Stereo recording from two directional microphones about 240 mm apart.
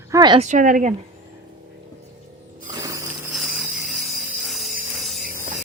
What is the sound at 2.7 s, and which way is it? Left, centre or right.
Ratchet, centre.